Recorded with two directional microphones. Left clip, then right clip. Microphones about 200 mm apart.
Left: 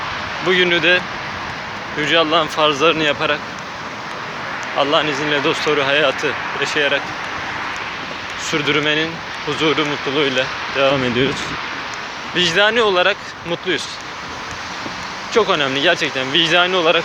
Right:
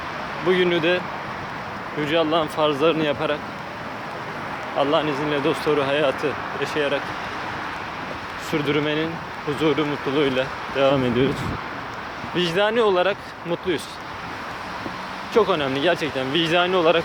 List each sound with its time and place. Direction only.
0.4 s speech: 15° right (ahead or behind)
4.8 s speech: 10° right (ahead or behind)
8.4 s speech: 10° right (ahead or behind)
12.4 s speech: 10° right (ahead or behind)
15.3 s speech: 15° right (ahead or behind)